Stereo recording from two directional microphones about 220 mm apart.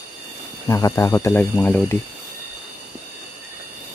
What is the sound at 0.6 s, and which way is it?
Speech, 15° left (ahead or behind).